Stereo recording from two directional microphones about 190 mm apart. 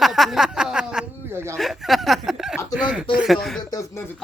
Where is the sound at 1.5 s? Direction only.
Centre (ahead or behind).